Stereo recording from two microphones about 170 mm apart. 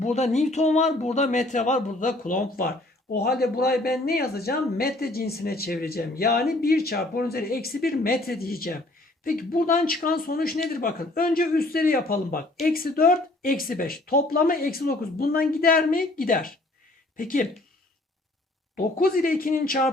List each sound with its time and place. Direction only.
0.0 s speech: 45° left (ahead or behind)
18.8 s speech: 60° left (ahead or behind)